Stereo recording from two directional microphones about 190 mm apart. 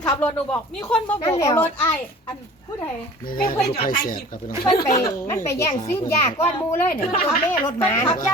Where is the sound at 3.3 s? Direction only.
50° left (ahead or behind).